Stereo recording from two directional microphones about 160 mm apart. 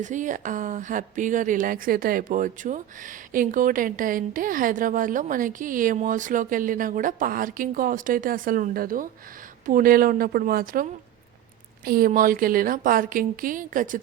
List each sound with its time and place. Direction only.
0.0 s speech: 50° right (ahead or behind)
11.9 s speech: 65° right (ahead or behind)